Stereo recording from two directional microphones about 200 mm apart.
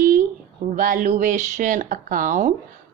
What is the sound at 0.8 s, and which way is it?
A woman's voice, 40° right (ahead or behind).